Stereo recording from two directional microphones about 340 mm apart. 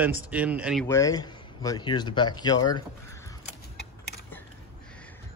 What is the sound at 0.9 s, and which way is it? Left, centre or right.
Speech, centre.